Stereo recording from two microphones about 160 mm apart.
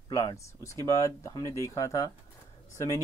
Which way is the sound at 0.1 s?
20° left (ahead or behind).